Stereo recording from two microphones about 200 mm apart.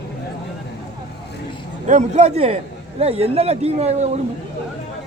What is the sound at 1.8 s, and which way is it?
A man's voice, 35° right (ahead or behind).